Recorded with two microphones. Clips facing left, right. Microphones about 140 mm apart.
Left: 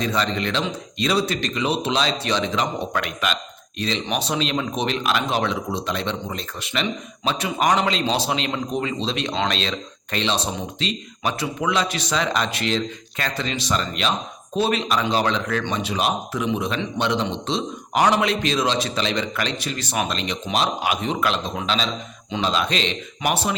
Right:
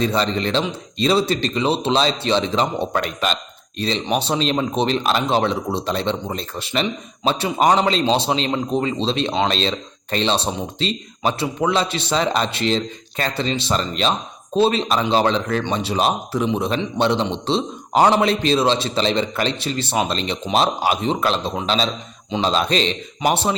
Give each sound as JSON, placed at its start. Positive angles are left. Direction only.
{"t": 0.0, "sound": "speech", "side_deg": -30}